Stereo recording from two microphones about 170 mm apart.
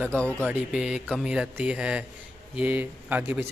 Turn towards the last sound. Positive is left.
turn(degrees=-10)  # may be behind; listen again after turning